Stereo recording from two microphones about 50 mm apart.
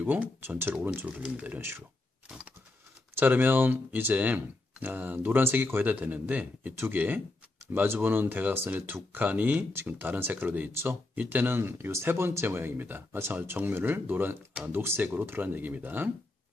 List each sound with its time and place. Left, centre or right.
0.0 s speech: right
0.6 s speech: right
1.0 s speech: right
3.2 s speech: right
6.7 s speech: right
7.7 s speech: right
10.4 s speech: right
10.8 s speech: right